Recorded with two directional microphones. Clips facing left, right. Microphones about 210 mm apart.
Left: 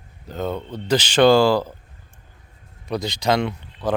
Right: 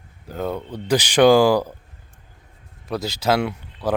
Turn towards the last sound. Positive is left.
turn(degrees=-10)  # may be behind; listen again after turning